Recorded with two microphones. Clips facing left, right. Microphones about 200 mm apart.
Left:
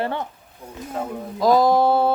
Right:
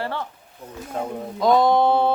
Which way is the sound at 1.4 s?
Centre (ahead or behind).